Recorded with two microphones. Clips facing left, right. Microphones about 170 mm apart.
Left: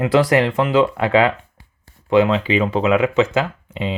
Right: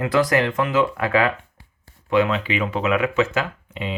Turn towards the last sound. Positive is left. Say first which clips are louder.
# left 4 dB
turn(degrees=30)  # may be behind; listen again after turning